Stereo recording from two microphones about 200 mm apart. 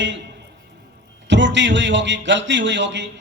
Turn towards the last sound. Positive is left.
turn(degrees=-65)  # may be behind; listen again after turning